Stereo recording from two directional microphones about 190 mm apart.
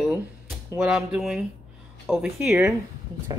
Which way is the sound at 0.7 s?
5° right (ahead or behind).